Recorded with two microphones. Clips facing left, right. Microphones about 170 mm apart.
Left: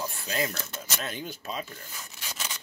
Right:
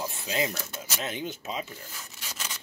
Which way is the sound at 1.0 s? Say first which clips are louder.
Right 5 dB; 20° right (ahead or behind).